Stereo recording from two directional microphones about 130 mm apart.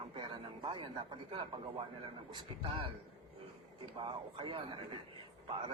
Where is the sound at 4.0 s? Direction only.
45° right (ahead or behind).